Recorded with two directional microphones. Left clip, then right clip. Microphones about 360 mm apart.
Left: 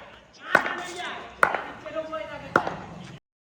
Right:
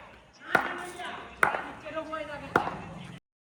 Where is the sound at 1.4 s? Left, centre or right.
Centre.